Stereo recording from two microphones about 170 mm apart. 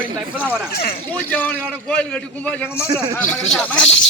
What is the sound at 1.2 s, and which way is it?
A man's voice, 10° left (ahead or behind).